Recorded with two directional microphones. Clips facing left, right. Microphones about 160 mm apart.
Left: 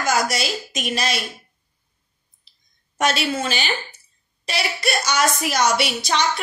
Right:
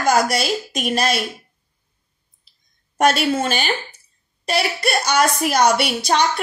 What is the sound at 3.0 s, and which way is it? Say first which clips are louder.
A woman's voice: right 5 dB; 55° right (ahead or behind).